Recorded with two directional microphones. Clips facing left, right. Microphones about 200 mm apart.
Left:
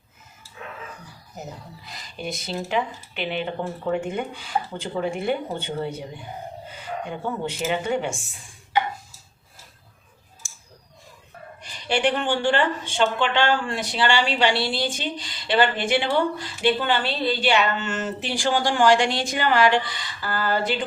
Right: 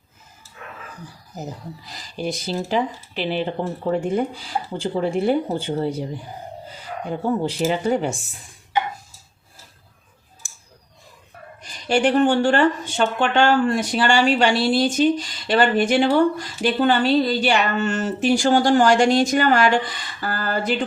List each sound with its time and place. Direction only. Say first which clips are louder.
2.0 s speech: right 5 dB; 35° right (ahead or behind)
10.4 s a sound: even; 55° right (ahead or behind)
11.6 s speech: right 4 dB; 45° right (ahead or behind)